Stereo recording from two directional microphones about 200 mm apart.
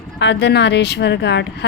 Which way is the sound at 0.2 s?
60° left (ahead or behind).